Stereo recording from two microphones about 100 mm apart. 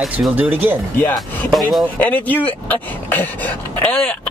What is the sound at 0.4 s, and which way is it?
Speech, 20° right (ahead or behind).